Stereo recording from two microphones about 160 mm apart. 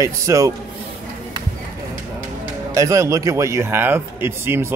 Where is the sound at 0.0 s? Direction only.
20° right (ahead or behind).